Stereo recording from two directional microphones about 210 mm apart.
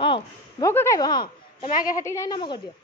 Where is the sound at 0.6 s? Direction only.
15° left (ahead or behind).